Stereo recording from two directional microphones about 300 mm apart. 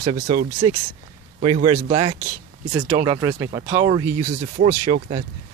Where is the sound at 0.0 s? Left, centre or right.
Centre.